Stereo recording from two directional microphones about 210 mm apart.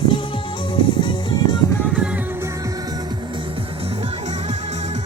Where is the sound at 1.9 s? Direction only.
5° right (ahead or behind).